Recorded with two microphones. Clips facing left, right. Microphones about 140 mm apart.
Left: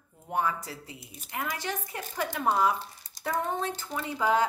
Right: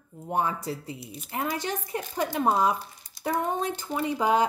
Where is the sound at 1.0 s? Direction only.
45° left (ahead or behind).